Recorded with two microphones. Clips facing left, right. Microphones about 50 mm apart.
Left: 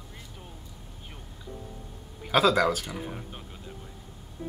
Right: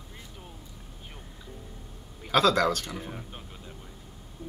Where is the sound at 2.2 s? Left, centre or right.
Centre.